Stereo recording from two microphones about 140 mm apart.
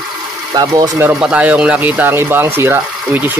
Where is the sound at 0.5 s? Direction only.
25° right (ahead or behind).